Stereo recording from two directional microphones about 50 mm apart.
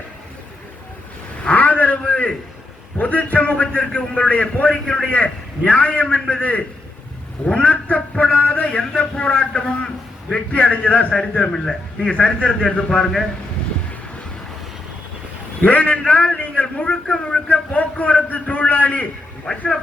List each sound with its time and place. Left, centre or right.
1.5 s a sound: left
3.0 s a man's voice: left
11.1 s a man's voice: centre
12.1 s a man's voice: left
15.6 s a man's voice: left